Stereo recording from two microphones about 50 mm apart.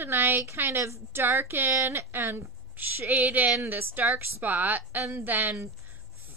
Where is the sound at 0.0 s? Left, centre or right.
Right.